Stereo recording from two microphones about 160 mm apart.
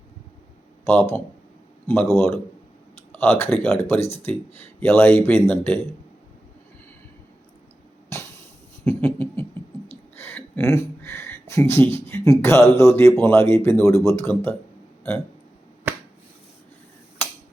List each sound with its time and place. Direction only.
1.9 s speech: 15° left (ahead or behind)
4.0 s speech: 40° left (ahead or behind)
4.3 s speech: 10° left (ahead or behind)
8.1 s a sound: 15° left (ahead or behind)
8.8 s speech: 10° left (ahead or behind)
17.2 s finger snapping: 10° left (ahead or behind)